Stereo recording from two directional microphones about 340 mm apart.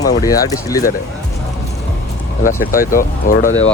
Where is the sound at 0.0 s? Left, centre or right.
Centre.